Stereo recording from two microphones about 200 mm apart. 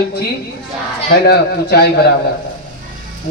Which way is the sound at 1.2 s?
55° left (ahead or behind).